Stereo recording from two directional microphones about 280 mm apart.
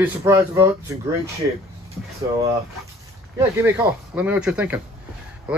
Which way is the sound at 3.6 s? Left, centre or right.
Centre.